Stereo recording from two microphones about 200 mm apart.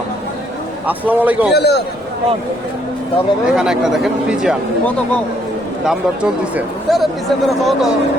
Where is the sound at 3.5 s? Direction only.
Centre (ahead or behind).